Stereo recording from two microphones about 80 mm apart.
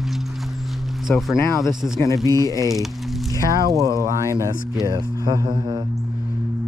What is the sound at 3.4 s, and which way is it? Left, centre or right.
Speech, right.